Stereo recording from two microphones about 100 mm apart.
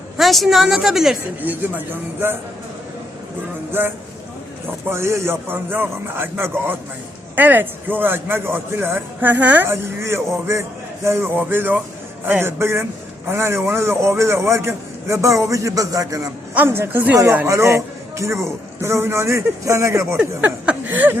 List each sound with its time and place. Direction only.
0.2 s a woman's voice: centre (ahead or behind)
1.4 s speech: 15° right (ahead or behind)
3.7 s a man's voice: 20° right (ahead or behind)
16.6 s a man's voice: 25° right (ahead or behind)
20.1 s speech: 15° right (ahead or behind)